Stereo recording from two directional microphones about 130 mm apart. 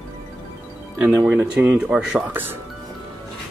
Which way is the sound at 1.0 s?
10° right (ahead or behind).